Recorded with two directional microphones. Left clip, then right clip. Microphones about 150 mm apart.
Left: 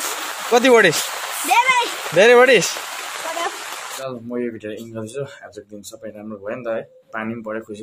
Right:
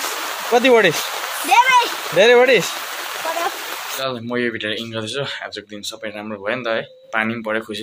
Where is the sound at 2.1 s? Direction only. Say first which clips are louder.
Left 1 dB; 30° left (ahead or behind).